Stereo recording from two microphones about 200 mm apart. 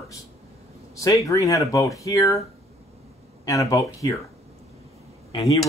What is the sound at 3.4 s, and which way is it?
Speech, 15° left (ahead or behind).